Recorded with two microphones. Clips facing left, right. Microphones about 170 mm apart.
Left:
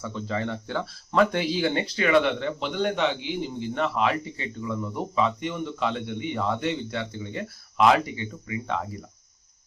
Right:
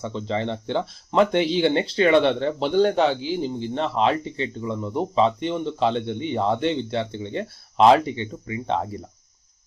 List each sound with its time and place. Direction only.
0.0 s speech: 25° right (ahead or behind)